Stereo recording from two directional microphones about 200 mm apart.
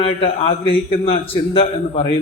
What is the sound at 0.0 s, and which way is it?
A man's voice, 30° left (ahead or behind).